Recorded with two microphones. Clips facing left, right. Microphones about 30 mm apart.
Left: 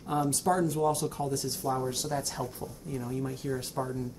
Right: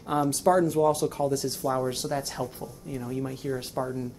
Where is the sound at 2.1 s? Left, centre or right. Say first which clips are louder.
Right 3 dB; centre.